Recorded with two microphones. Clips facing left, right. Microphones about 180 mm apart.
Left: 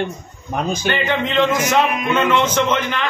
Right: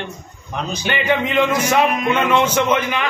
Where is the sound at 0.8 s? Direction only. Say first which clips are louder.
Right 4 dB; 10° right (ahead or behind).